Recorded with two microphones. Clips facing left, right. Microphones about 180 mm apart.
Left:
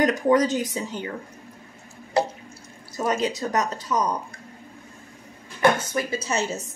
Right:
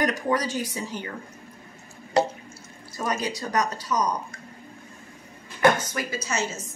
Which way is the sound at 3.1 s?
20° left (ahead or behind).